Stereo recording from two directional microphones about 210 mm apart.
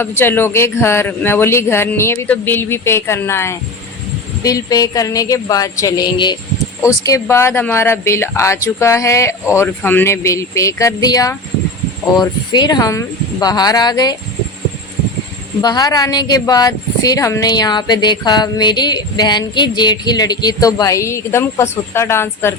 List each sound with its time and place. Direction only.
0.0 s speech: 10° left (ahead or behind)
15.6 s speech: 20° left (ahead or behind)